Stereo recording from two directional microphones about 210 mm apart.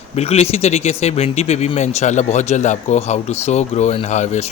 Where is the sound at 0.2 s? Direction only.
30° left (ahead or behind).